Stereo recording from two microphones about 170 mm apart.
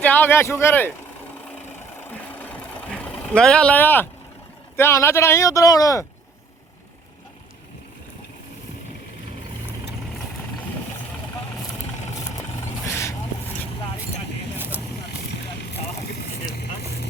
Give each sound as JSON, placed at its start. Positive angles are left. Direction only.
{"t": 0.0, "sound": "speech", "side_deg": 10}
{"t": 2.0, "sound": "vehicle", "side_deg": 10}
{"t": 4.8, "sound": "speech", "side_deg": 15}
{"t": 12.5, "sound": "vehicle", "side_deg": 15}